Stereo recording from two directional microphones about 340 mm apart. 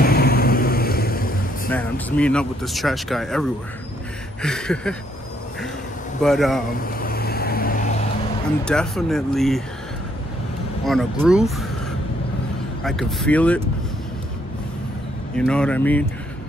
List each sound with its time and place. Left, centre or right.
0.0 s vehicle: left
1.7 s speech: centre
6.2 s speech: centre
6.8 s vehicle: left
8.6 s speech: centre
10.9 s speech: centre
12.8 s speech: centre
15.3 s speech: centre